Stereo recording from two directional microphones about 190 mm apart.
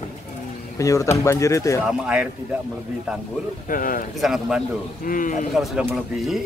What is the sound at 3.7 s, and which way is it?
Speech, 45° left (ahead or behind).